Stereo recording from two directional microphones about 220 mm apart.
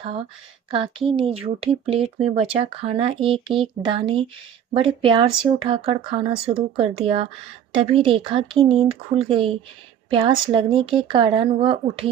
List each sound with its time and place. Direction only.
0.7 s speech: 25° right (ahead or behind)